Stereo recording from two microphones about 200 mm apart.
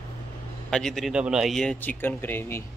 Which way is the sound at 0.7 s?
5° left (ahead or behind).